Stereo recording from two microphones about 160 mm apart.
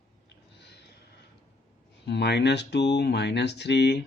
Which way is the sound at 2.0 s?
90° left.